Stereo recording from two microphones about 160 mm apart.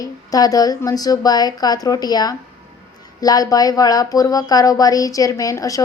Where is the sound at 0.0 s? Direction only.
20° left (ahead or behind).